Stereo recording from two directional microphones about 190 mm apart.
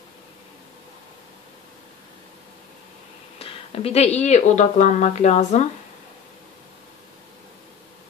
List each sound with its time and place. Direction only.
3.3 s speech: 30° left (ahead or behind)